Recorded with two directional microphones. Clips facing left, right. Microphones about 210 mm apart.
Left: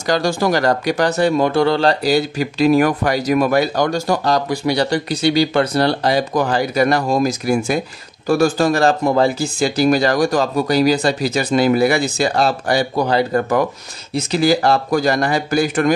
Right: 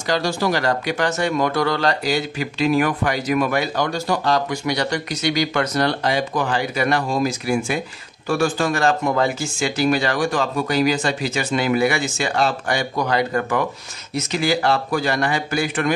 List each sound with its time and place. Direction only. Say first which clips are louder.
0.0 s speech: left 4 dB; 45° left (ahead or behind)